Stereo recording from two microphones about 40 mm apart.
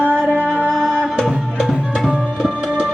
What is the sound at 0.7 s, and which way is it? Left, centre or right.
Music, centre.